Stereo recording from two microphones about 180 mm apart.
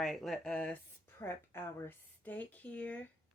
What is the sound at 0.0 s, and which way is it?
Speech, centre (ahead or behind).